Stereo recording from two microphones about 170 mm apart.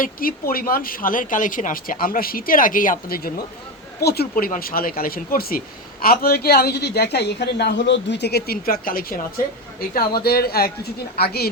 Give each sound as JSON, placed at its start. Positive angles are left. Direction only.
{"t": 0.0, "sound": "a woman's voice", "side_deg": 60}